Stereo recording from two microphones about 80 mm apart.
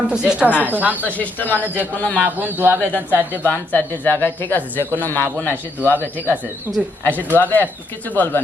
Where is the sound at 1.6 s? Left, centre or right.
Right.